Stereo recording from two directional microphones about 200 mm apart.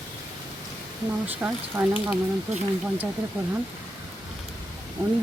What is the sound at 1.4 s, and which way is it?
Speech, 10° right (ahead or behind).